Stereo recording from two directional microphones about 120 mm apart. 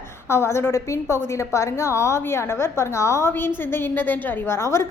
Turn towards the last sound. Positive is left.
turn(degrees=20)  # may be behind; listen again after turning